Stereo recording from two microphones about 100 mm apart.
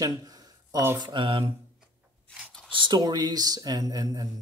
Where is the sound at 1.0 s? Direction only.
50° right (ahead or behind).